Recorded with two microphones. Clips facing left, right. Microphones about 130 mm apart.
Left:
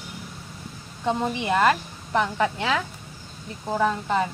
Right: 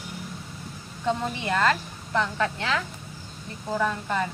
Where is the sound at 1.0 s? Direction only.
20° left (ahead or behind).